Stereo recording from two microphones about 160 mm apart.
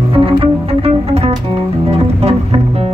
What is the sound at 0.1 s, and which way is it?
Music, 35° right (ahead or behind).